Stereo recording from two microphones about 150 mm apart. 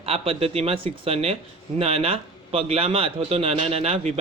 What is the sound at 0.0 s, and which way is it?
A man's voice, 40° right (ahead or behind).